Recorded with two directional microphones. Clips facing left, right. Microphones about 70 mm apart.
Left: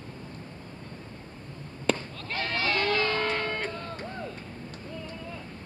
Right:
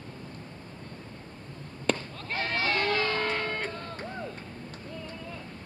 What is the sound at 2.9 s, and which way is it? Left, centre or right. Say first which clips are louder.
Music: left 1 dB; centre.